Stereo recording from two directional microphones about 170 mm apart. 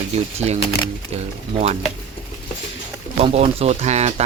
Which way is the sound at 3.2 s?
35° right (ahead or behind).